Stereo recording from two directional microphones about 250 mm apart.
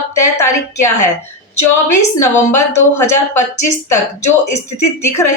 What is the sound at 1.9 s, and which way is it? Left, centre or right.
A woman's voice, left.